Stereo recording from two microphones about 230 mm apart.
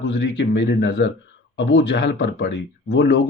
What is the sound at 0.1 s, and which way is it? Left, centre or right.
Speech, left.